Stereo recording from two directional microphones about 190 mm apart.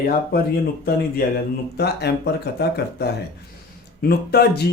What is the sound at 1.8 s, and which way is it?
Speech, 60° left (ahead or behind).